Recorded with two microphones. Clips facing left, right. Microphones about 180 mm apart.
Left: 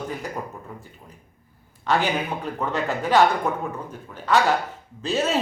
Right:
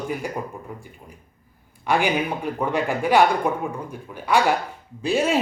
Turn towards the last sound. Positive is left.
turn(degrees=-10)  # may be behind; listen again after turning